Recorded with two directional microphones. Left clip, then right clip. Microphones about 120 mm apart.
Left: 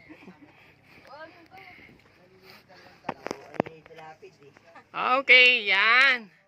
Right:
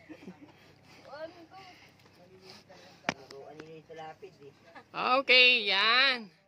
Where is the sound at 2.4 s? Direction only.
20° right (ahead or behind).